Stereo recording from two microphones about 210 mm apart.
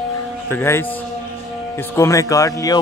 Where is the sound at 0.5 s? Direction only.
10° left (ahead or behind).